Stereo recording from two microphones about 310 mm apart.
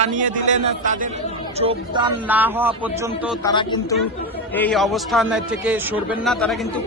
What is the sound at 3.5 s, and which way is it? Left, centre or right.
Speech, centre.